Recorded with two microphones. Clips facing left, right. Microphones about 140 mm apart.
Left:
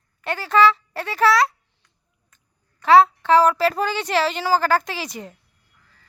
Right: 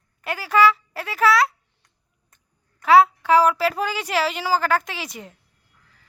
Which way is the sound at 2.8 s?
10° right (ahead or behind).